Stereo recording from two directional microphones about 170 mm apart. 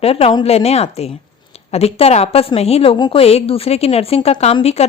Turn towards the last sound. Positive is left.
turn(degrees=35)  # may be behind; listen again after turning